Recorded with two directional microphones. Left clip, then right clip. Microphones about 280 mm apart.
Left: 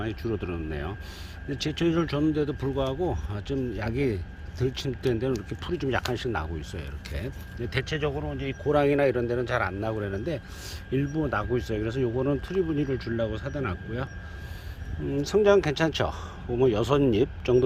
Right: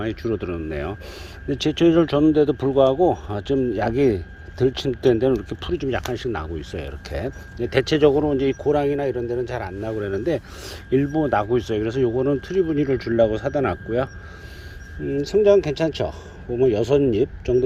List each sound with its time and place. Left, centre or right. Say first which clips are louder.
0.0 s speech: right 6 dB; centre
8.6 s speech: left 3 dB; centre
15.1 s speech: right 5 dB; centre